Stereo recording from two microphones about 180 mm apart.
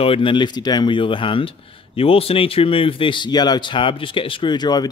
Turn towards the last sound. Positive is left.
turn(degrees=20)  # may be behind; listen again after turning